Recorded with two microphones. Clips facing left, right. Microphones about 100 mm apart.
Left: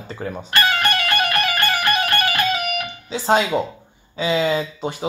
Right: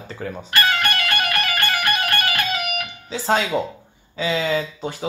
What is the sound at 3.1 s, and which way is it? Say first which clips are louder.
Speech: left 3 dB; 15° left (ahead or behind).